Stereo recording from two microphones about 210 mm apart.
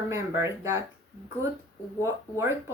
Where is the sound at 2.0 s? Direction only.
10° right (ahead or behind).